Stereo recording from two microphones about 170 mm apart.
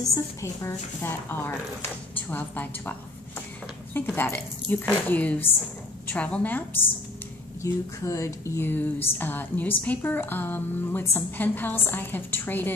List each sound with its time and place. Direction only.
0.0 s a woman's voice: 20° left (ahead or behind)